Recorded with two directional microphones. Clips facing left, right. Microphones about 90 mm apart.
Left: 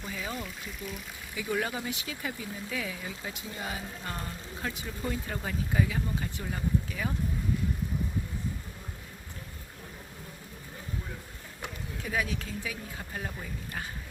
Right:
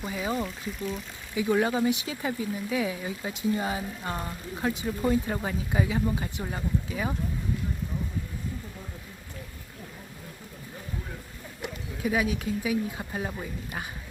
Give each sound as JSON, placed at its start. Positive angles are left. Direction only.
{"t": 0.2, "sound": "speech", "side_deg": -30}
{"t": 0.4, "sound": "speech", "side_deg": 0}
{"t": 1.4, "sound": "speech", "side_deg": -20}
{"t": 12.0, "sound": "speech", "side_deg": -10}